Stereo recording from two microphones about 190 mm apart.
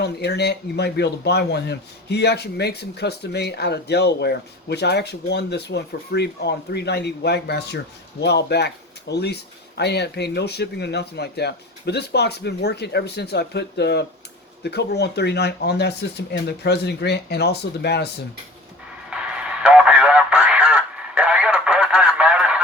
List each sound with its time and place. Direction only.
0.0 s a man's voice: 60° left (ahead or behind)
19.1 s radio: 5° right (ahead or behind)